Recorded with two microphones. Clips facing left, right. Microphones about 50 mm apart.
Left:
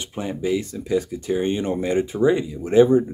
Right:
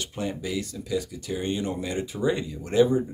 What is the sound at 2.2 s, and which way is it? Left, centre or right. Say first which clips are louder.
Speech: left 5 dB; centre.